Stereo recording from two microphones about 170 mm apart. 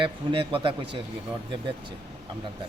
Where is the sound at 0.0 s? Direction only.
30° right (ahead or behind).